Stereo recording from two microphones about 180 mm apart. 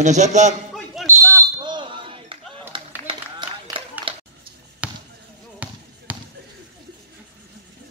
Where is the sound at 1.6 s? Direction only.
25° right (ahead or behind).